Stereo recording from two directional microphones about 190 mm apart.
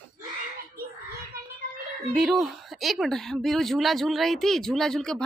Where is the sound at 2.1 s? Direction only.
Centre (ahead or behind).